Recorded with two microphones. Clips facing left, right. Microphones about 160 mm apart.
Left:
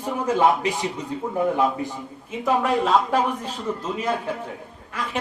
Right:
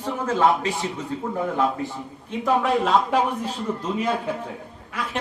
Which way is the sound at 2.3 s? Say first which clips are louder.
Right 1 dB; centre (ahead or behind).